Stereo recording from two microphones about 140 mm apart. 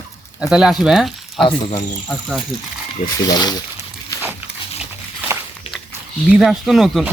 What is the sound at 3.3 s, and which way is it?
Speech, 30° left (ahead or behind).